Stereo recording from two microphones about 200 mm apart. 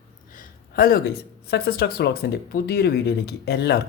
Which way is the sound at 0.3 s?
45° left (ahead or behind).